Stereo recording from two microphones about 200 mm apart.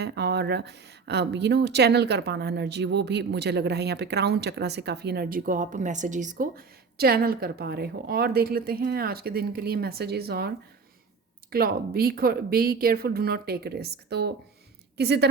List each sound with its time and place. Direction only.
0.0 s speech: 55° right (ahead or behind)
11.5 s a woman's voice: 50° right (ahead or behind)